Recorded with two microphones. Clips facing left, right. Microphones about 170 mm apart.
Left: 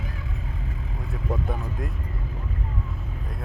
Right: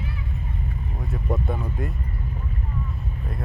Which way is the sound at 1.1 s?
Centre (ahead or behind).